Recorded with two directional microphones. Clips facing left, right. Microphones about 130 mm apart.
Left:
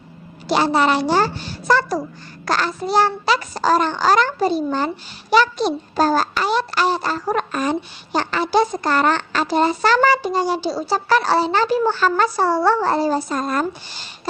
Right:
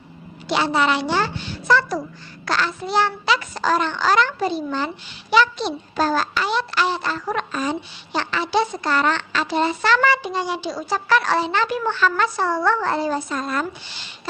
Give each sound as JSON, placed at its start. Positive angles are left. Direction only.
{"t": 0.4, "sound": "a child's voice", "side_deg": 40}